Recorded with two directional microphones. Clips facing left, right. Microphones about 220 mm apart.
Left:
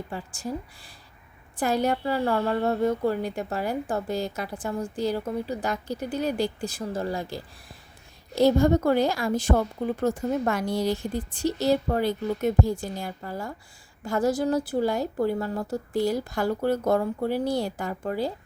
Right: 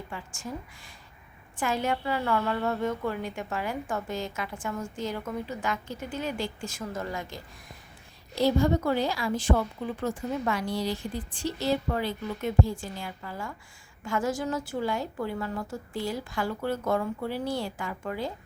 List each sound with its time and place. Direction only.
0.1 s a woman's voice: 35° left (ahead or behind)
8.4 s a woman's voice: 45° left (ahead or behind)